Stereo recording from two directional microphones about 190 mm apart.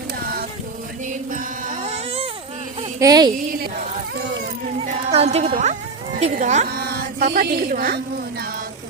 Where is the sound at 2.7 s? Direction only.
20° right (ahead or behind).